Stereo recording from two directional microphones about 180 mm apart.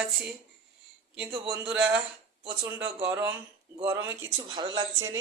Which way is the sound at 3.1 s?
10° right (ahead or behind).